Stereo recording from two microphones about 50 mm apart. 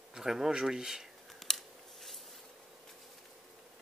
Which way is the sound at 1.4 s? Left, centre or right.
Centre.